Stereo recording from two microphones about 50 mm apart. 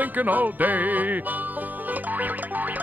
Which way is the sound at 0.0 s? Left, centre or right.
Right.